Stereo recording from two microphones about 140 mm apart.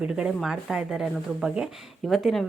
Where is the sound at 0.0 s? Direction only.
5° right (ahead or behind).